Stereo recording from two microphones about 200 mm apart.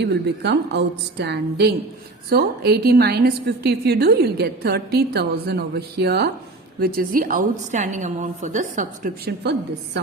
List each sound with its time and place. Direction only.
0.0 s a woman's voice: 60° right (ahead or behind)